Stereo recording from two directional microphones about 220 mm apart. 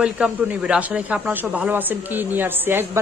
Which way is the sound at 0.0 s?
5° right (ahead or behind).